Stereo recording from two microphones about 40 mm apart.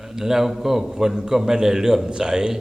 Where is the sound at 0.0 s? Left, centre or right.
Centre.